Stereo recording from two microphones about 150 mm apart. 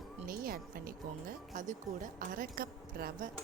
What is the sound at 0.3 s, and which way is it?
Music, 75° right (ahead or behind).